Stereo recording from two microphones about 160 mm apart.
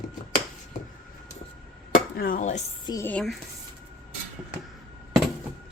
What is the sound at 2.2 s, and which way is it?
Speech, 60° left (ahead or behind).